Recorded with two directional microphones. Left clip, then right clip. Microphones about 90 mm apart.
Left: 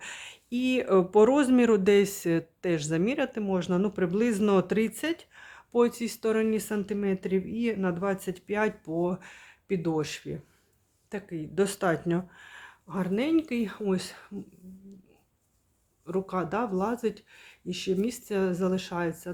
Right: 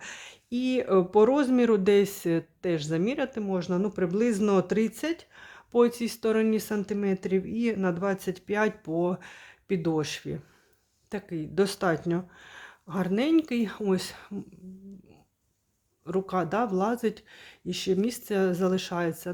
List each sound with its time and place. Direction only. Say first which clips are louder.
0.0 s speech: left 1 dB; 15° right (ahead or behind)
11.1 s speech: right 2 dB; 40° right (ahead or behind)
11.6 s speech: even; 20° right (ahead or behind)
11.9 s speech: even; 5° right (ahead or behind)
12.4 s a sound: right 1 dB; 20° right (ahead or behind)
12.9 s speech: right 2 dB; 40° right (ahead or behind)
16.0 s speech: right 2 dB; 40° right (ahead or behind)